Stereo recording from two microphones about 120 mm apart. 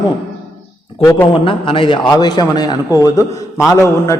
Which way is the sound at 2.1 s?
35° left (ahead or behind).